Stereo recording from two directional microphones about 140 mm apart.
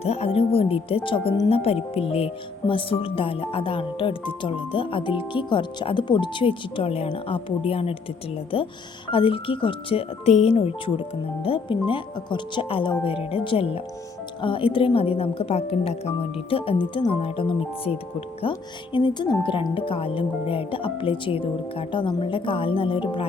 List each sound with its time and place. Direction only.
0.0 s speech: 50° left (ahead or behind)